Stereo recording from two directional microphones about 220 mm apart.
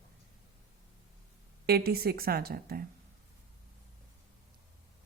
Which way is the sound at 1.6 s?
45° right (ahead or behind).